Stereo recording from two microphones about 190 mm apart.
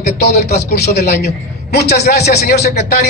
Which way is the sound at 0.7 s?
60° left (ahead or behind).